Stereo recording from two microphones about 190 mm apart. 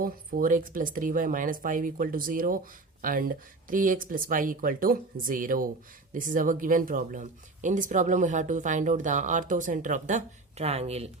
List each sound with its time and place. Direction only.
0.0 s speech: 45° right (ahead or behind)